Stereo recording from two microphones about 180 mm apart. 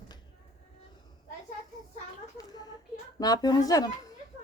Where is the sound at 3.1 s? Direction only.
20° left (ahead or behind).